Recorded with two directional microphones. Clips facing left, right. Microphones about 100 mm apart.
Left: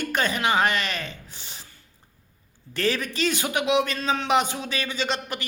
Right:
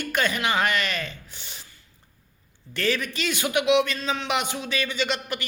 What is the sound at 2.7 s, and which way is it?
A man's voice, 35° left (ahead or behind).